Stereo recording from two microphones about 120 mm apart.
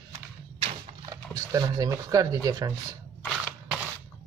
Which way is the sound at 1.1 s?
30° right (ahead or behind).